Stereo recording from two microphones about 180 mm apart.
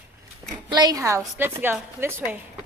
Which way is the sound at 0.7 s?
25° right (ahead or behind).